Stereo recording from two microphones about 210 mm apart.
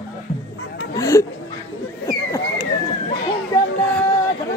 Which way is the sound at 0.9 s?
15° left (ahead or behind).